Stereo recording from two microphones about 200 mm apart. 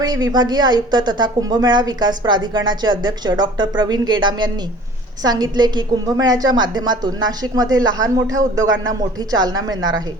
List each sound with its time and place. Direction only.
0.0 s a woman's voice: 20° right (ahead or behind)
8.6 s speech: 70° right (ahead or behind)
8.9 s a woman's voice: 20° right (ahead or behind)